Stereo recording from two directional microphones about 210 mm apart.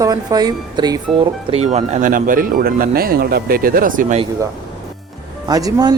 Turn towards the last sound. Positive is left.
turn(degrees=-20)  # may be behind; listen again after turning